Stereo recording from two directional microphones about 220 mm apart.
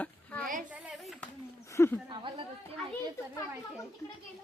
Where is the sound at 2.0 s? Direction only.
20° right (ahead or behind).